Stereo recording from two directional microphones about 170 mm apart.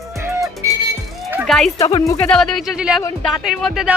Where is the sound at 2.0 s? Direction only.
20° left (ahead or behind).